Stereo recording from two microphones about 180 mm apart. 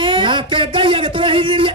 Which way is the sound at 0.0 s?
25° right (ahead or behind).